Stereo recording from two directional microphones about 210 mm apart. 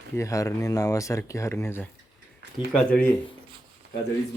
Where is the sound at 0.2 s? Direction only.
15° left (ahead or behind).